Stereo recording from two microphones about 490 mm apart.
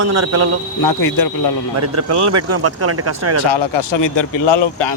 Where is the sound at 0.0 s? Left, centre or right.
Right.